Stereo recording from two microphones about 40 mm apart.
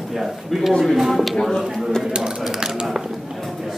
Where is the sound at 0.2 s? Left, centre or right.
Centre.